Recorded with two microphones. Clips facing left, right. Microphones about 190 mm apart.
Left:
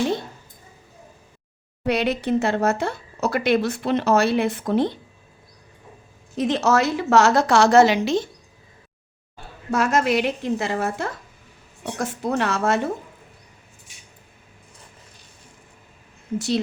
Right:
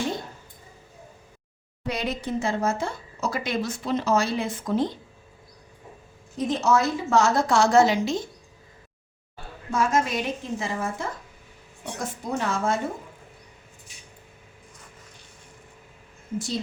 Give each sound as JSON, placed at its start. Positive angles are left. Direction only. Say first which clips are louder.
{"t": 1.9, "sound": "speech", "louder": "left 7 dB", "side_deg": 70}
{"t": 6.3, "sound": "a woman's voice", "louder": "left 3 dB", "side_deg": 75}
{"t": 9.7, "sound": "a woman's voice", "louder": "left 4 dB", "side_deg": 70}